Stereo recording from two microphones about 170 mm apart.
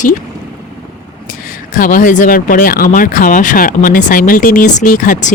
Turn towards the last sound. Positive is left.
turn(degrees=50)  # may be behind; listen again after turning